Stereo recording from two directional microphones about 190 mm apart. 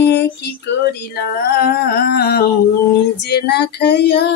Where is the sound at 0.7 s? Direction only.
65° left (ahead or behind).